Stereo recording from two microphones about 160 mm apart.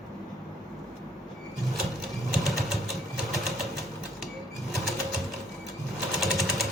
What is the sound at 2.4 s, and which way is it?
Vehicle, centre (ahead or behind).